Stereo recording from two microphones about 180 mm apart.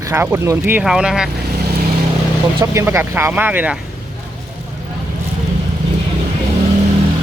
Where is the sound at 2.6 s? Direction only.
15° right (ahead or behind).